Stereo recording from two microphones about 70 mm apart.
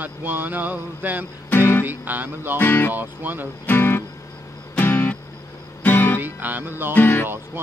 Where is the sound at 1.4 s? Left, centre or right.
Left.